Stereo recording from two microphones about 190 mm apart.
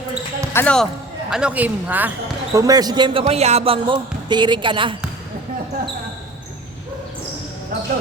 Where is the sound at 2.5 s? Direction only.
20° right (ahead or behind).